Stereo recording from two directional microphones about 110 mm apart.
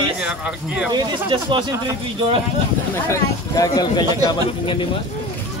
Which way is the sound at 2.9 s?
30° left (ahead or behind).